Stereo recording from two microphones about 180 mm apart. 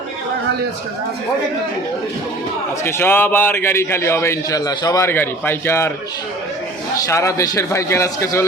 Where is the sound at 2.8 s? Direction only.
10° left (ahead or behind).